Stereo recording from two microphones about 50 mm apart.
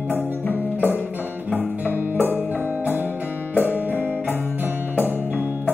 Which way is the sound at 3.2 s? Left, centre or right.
Left.